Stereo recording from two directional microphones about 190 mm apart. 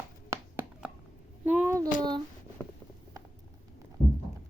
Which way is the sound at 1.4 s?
10° right (ahead or behind).